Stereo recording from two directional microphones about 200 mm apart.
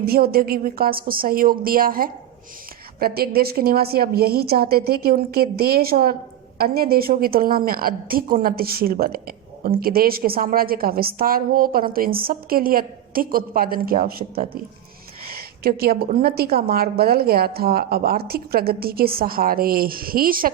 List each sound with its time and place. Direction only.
0.0 s a woman's voice: 50° right (ahead or behind)
15.6 s a woman's voice: 50° right (ahead or behind)